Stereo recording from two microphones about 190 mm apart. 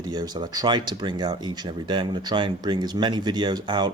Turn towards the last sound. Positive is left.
turn(degrees=-25)  # may be behind; listen again after turning